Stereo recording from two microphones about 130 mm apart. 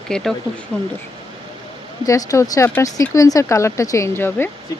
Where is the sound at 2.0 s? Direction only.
25° left (ahead or behind).